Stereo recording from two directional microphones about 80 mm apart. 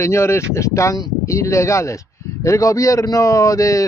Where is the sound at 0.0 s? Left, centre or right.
Left.